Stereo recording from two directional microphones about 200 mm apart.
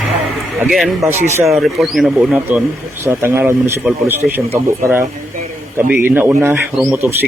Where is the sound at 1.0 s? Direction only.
Centre (ahead or behind).